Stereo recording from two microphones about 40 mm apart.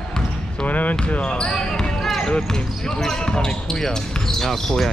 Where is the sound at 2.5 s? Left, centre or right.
Centre.